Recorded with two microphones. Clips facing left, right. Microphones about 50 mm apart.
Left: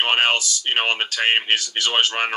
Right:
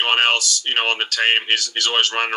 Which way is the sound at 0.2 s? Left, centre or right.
Centre.